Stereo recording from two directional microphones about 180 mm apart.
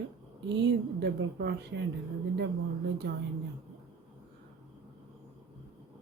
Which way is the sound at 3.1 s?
60° right (ahead or behind).